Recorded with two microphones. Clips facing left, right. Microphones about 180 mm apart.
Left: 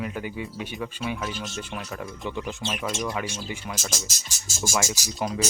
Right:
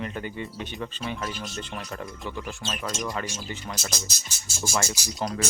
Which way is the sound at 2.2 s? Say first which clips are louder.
Left 6 dB; 20° left (ahead or behind).